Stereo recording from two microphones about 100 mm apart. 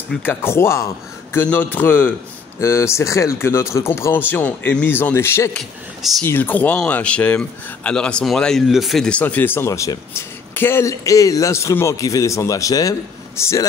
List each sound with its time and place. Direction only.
0.2 s speech: 20° left (ahead or behind)
1.4 s speech: 15° left (ahead or behind)
2.6 s speech: 25° left (ahead or behind); by 9.2 s 5° left (ahead or behind)
9.2 s a man's voice: 20° left (ahead or behind)